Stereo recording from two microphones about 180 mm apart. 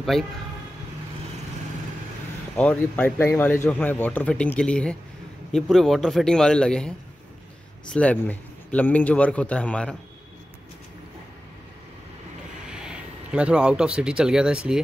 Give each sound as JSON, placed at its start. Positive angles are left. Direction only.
{"t": 0.1, "sound": "a man's voice", "side_deg": 0}
{"t": 2.5, "sound": "a man's voice", "side_deg": 5}
{"t": 7.9, "sound": "speech", "side_deg": 10}
{"t": 12.6, "sound": "speech", "side_deg": -5}